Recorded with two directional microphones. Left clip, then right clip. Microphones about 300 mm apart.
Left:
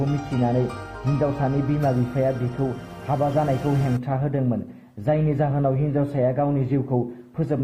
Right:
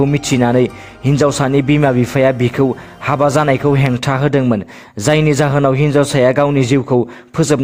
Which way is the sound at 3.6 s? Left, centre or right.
Right.